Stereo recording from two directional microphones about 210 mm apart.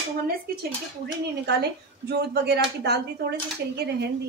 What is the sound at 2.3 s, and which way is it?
Speech, 50° right (ahead or behind).